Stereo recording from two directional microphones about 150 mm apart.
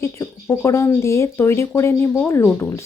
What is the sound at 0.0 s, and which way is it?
Speech, 20° left (ahead or behind).